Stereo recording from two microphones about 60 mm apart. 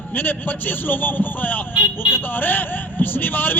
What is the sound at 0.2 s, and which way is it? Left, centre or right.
Speech, left.